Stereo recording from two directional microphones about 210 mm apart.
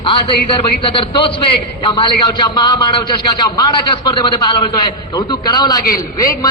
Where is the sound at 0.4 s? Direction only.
25° left (ahead or behind).